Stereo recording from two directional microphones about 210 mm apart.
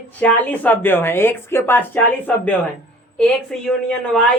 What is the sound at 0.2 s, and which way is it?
A woman's voice, 10° left (ahead or behind).